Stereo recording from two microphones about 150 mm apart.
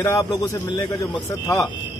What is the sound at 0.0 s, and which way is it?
Speech, 20° left (ahead or behind).